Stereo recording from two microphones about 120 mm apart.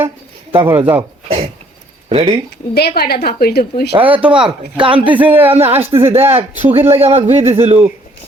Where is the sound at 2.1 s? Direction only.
55° right (ahead or behind).